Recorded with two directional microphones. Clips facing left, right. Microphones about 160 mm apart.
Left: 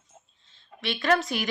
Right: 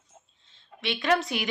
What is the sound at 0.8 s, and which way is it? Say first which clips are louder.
Speech: left 1 dB; 15° right (ahead or behind).